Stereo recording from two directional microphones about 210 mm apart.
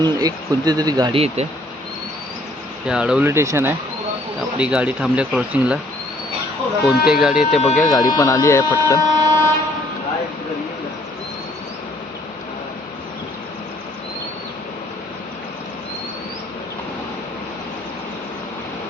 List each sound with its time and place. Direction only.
0.0 s speech: 20° right (ahead or behind)
2.8 s speech: 5° right (ahead or behind)
6.8 s speech: centre (ahead or behind)
7.8 s speech: 15° left (ahead or behind)
8.9 s a sound: 10° left (ahead or behind)